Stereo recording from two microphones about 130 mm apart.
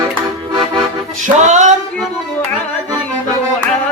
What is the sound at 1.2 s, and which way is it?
Music, 65° right (ahead or behind).